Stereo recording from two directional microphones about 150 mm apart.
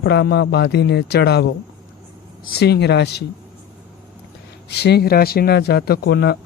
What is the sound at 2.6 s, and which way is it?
Speech, 90° left.